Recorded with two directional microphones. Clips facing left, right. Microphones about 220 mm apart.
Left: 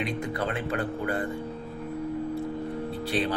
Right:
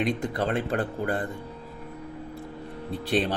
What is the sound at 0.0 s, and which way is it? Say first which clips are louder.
Speech: right 3 dB; 35° right (ahead or behind).